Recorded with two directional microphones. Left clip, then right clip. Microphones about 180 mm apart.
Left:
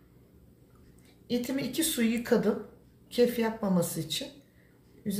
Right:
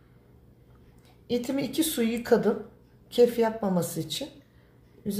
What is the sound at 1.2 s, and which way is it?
A woman's voice, 50° right (ahead or behind).